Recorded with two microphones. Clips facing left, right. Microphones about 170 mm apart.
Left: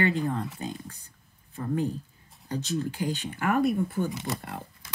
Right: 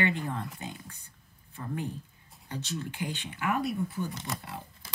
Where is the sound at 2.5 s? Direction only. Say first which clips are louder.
Left 7 dB; 35° left (ahead or behind); by 4.0 s 50° left (ahead or behind).